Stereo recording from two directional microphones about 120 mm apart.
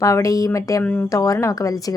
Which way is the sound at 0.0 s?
25° left (ahead or behind).